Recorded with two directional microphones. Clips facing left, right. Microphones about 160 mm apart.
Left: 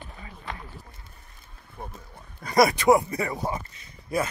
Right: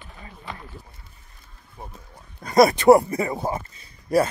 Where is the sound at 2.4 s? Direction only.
25° right (ahead or behind).